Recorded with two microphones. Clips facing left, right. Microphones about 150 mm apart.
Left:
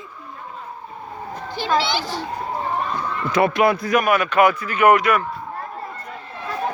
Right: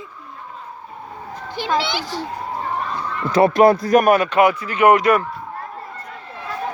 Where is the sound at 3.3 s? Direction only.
40° right (ahead or behind).